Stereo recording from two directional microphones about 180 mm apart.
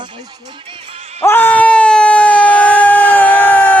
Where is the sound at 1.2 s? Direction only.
10° left (ahead or behind).